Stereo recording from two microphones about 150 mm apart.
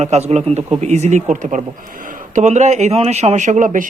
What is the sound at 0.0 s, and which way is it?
A man's voice, 45° right (ahead or behind).